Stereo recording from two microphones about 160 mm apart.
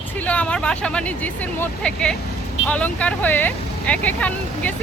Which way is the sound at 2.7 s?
10° left (ahead or behind).